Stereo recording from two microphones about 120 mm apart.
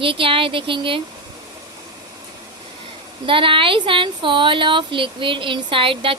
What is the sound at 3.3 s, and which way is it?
A woman's voice, 45° right (ahead or behind).